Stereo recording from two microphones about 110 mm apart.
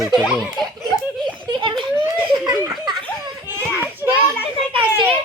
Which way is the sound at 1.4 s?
45° right (ahead or behind).